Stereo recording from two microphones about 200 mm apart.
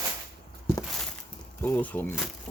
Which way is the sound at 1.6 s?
10° left (ahead or behind).